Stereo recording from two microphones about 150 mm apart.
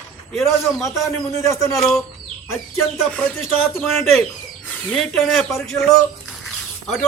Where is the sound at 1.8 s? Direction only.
Centre (ahead or behind).